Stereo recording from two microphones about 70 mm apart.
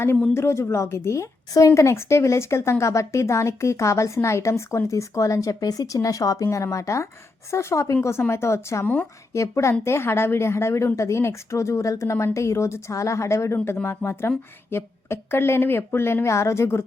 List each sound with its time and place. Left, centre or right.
0.0 s a woman's voice: left